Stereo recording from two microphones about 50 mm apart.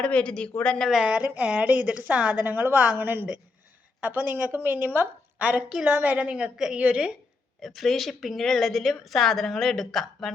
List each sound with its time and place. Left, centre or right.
0.0 s speech: centre
1.0 s a woman's voice: right
2.7 s a woman's voice: right
3.0 s a woman's voice: right
5.4 s a woman's voice: right
6.3 s a woman's voice: centre
6.7 s a woman's voice: right
7.6 s a woman's voice: centre